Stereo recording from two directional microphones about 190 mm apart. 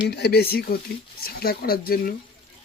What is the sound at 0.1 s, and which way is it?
Speech, 60° left (ahead or behind).